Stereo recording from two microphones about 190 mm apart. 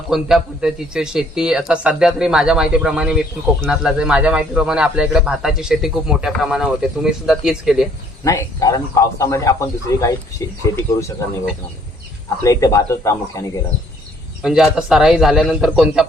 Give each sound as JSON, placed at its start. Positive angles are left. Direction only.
{"t": 0.1, "sound": "a man's voice", "side_deg": 0}
{"t": 8.2, "sound": "a man's voice", "side_deg": 15}
{"t": 12.4, "sound": "a man's voice", "side_deg": 15}
{"t": 14.4, "sound": "a man's voice", "side_deg": -5}